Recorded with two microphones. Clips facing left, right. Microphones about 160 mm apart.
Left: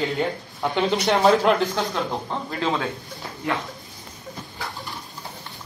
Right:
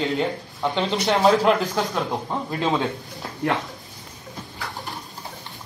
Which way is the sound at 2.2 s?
15° right (ahead or behind).